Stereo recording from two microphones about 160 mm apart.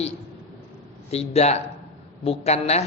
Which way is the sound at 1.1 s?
40° left (ahead or behind).